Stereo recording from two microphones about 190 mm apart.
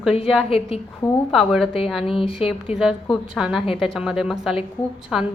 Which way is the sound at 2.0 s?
30° left (ahead or behind).